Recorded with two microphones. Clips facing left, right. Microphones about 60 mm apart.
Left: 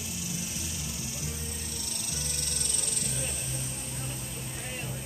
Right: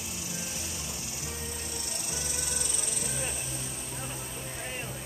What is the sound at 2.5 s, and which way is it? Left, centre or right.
Insect, centre.